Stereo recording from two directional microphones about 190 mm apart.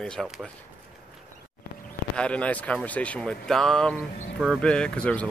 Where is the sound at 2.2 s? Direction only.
5° left (ahead or behind).